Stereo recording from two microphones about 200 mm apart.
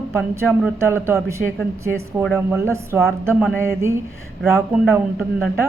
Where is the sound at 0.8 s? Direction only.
15° right (ahead or behind).